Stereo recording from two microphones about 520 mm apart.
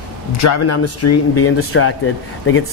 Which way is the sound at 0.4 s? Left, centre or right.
Left.